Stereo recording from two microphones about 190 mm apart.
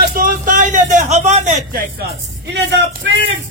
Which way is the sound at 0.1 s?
45° right (ahead or behind).